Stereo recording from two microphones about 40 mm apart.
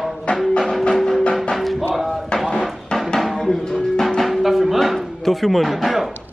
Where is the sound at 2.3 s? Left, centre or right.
Left.